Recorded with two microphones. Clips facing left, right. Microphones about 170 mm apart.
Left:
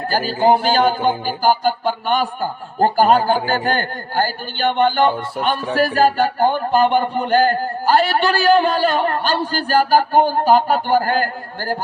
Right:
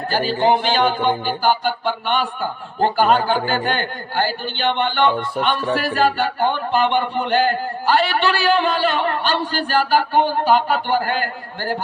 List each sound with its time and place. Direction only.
0.1 s speech: 40° left (ahead or behind)